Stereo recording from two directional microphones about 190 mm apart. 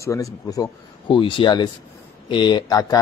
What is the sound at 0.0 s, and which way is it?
A man's voice, 15° left (ahead or behind).